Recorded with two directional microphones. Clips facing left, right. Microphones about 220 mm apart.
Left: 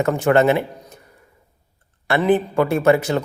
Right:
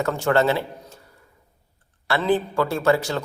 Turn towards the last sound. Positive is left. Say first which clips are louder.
# left 4 dB
turn(degrees=20)  # may be behind; listen again after turning